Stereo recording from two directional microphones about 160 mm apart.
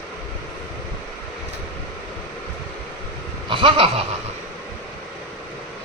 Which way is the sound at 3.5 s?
35° right (ahead or behind).